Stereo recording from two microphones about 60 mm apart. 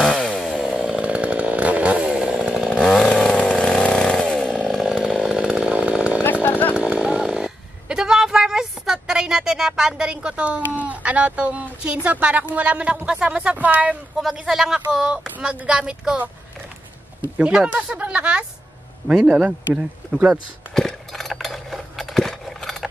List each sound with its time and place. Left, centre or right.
0.0 s chainsaw: centre
0.7 s chainsaw: centre
2.8 s chainsaw: centre
5.4 s chainsaw: right
6.4 s chainsaw: left
6.8 s chainsaw: centre
7.3 s a sound: centre
13.6 s speech: right
14.3 s speech: centre
17.4 s speech: centre
17.9 s a sound: right
19.1 s speech: centre
19.7 s speech: centre
20.7 s cutlery: centre